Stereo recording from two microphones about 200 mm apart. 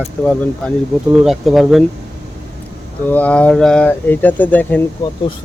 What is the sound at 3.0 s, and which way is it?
Speech, 5° left (ahead or behind).